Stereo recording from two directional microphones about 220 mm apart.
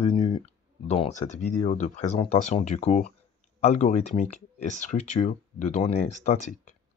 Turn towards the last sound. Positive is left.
turn(degrees=35)  # may be behind; listen again after turning